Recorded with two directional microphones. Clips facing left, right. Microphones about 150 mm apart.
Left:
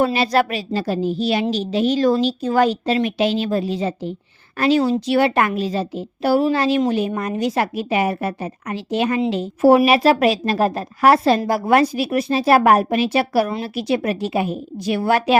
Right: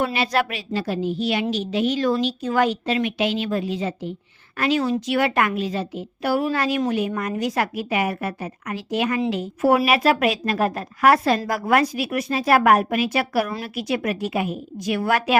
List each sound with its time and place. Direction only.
0.0 s a woman's voice: 35° left (ahead or behind)